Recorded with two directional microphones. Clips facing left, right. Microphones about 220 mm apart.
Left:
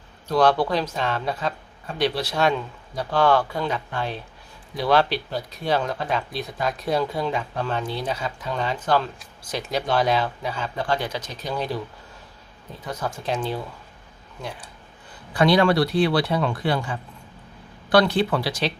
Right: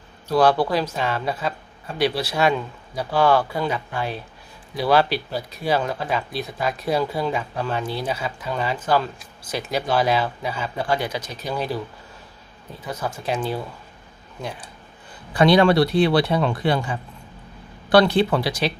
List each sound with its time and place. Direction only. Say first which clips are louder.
0.3 s speech: right 1 dB; 5° right (ahead or behind)
12.8 s speech: right 1 dB; 5° right (ahead or behind)
15.3 s speech: right 3 dB; 20° right (ahead or behind)